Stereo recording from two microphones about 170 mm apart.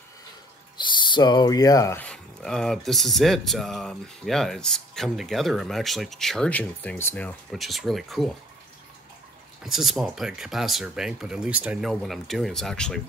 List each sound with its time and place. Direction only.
0.7 s speech: 25° left (ahead or behind)
2.0 s speech: 5° left (ahead or behind)
9.6 s speech: centre (ahead or behind)